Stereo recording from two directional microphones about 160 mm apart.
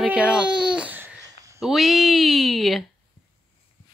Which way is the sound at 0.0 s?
5° right (ahead or behind).